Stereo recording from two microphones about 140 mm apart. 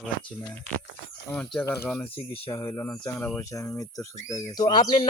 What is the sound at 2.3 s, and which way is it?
Speech, 40° left (ahead or behind).